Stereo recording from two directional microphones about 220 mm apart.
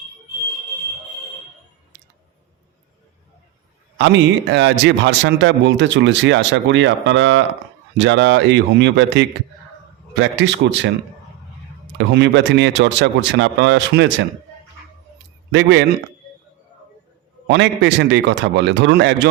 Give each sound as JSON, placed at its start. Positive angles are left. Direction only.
{"t": 3.9, "sound": "a man's voice", "side_deg": -55}
{"t": 11.9, "sound": "speech", "side_deg": -50}
{"t": 17.5, "sound": "speech", "side_deg": -50}